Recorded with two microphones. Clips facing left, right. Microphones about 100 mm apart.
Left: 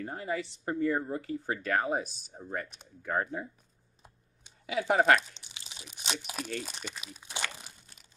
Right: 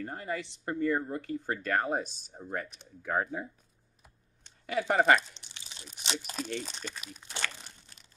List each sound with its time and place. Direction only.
0.0 s speech: 5° left (ahead or behind)
4.4 s tearing: 5° left (ahead or behind)
5.8 s crunch: 5° left (ahead or behind)
6.1 s speech: 5° left (ahead or behind)
6.8 s speech: 15° left (ahead or behind)
7.2 s crunch: 15° left (ahead or behind)